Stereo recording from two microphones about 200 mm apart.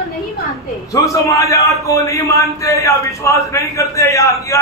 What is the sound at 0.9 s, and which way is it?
A man's voice, 15° left (ahead or behind).